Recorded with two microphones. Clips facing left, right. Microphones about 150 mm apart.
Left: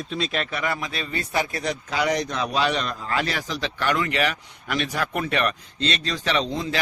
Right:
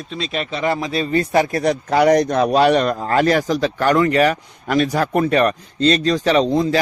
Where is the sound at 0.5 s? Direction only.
30° right (ahead or behind).